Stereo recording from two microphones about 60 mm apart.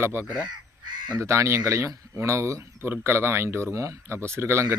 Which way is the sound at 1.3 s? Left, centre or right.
Right.